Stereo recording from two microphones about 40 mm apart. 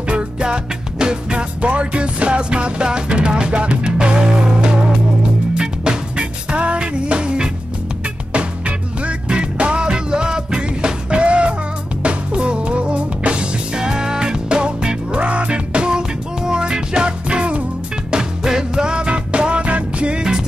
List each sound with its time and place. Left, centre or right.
0.1 s music: right
13.7 s music: centre
18.1 s music: centre